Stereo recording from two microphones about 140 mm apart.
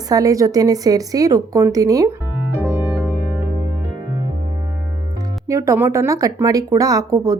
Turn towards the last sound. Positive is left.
turn(degrees=-25)  # may be behind; listen again after turning